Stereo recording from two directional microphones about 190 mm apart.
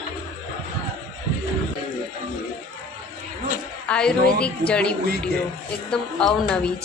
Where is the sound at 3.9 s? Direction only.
5° left (ahead or behind).